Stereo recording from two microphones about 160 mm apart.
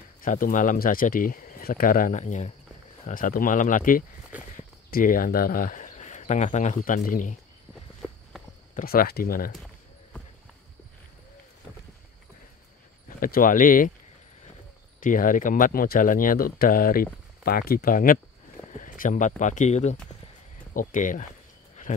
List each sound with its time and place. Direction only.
0.2 s speech: 60° left (ahead or behind)
3.1 s speech: 60° left (ahead or behind)
8.7 s speech: 65° left (ahead or behind)
13.2 s speech: 60° left (ahead or behind)
15.0 s speech: 60° left (ahead or behind)